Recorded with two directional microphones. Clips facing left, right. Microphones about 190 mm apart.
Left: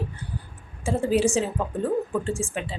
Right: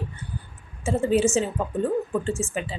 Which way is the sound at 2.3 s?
10° left (ahead or behind).